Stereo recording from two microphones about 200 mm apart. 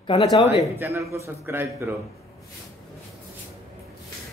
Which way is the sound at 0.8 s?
15° right (ahead or behind).